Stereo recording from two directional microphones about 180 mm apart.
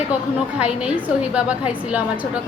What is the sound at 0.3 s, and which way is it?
A woman's voice, 5° right (ahead or behind).